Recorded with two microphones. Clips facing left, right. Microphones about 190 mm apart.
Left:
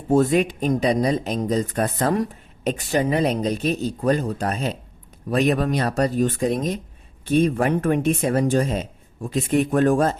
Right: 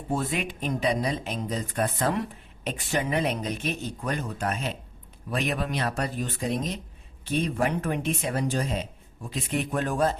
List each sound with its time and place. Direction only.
0.1 s speech: 40° left (ahead or behind)